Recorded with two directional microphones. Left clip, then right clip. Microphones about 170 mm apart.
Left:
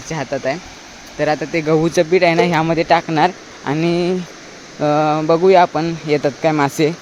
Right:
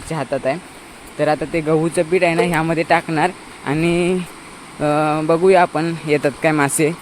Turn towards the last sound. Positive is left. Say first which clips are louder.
# left 1 dB
turn(degrees=5)  # may be behind; listen again after turning